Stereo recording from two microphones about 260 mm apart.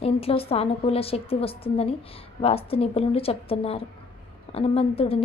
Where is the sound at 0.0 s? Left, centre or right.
Left.